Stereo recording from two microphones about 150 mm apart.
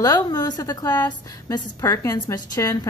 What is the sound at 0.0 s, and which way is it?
A woman's voice, 25° left (ahead or behind).